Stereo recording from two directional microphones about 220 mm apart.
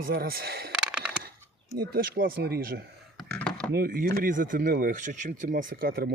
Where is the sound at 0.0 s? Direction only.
45° right (ahead or behind).